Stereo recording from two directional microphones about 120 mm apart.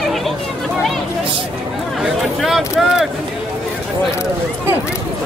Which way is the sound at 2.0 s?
Centre (ahead or behind).